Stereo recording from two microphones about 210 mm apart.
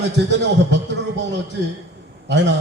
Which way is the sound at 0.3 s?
55° right (ahead or behind).